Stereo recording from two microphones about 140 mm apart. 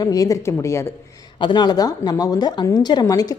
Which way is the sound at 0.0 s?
25° left (ahead or behind).